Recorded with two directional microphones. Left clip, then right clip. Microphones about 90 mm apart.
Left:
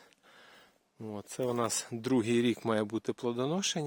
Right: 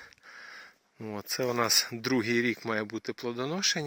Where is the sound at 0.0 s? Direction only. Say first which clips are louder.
Right 10 dB; 10° left (ahead or behind).